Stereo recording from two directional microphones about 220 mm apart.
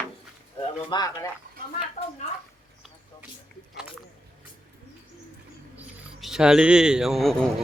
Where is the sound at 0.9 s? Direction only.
20° left (ahead or behind).